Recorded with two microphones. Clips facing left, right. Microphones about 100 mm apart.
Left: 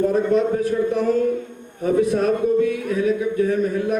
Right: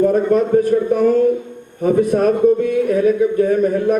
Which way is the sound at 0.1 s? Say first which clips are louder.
Right 4 dB; 50° right (ahead or behind).